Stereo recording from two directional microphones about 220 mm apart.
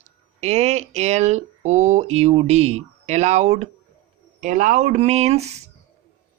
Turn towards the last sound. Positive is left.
turn(degrees=-30)  # may be behind; listen again after turning